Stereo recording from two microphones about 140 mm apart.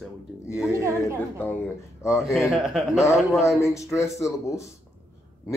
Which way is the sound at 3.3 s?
20° left (ahead or behind).